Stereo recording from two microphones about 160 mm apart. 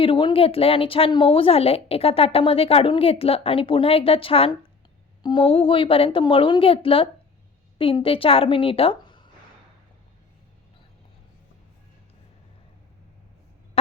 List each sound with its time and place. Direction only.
0.0 s a woman's voice: 30° left (ahead or behind)